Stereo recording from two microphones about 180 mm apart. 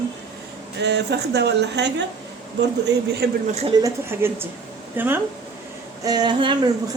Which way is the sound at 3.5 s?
35° right (ahead or behind).